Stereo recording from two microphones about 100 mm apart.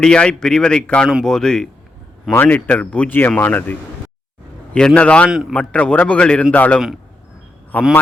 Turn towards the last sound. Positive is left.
turn(degrees=15)  # may be behind; listen again after turning